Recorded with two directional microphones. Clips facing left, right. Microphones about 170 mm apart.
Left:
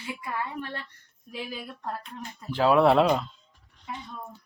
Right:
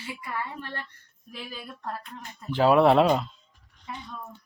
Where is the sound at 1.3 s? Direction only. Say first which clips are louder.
Left 3 dB; 15° left (ahead or behind).